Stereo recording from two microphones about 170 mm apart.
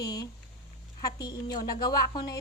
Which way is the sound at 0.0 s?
20° left (ahead or behind).